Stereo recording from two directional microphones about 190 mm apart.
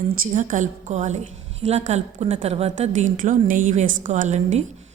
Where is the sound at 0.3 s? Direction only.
40° right (ahead or behind).